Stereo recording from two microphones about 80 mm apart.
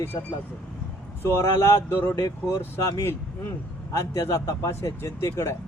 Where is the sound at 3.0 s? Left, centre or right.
Left.